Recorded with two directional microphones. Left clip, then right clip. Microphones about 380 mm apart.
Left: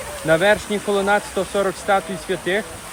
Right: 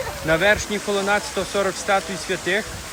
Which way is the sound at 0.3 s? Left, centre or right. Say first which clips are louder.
Left 2 dB; centre.